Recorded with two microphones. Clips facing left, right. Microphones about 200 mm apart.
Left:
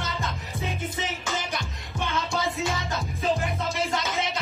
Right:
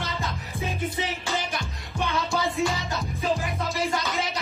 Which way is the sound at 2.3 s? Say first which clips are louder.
Right 3 dB; centre (ahead or behind).